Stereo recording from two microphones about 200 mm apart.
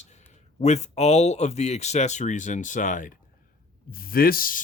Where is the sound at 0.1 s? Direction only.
35° left (ahead or behind).